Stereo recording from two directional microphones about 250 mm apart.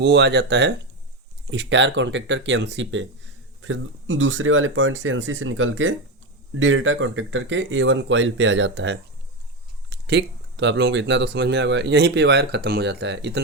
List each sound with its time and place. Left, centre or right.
0.0 s speech: right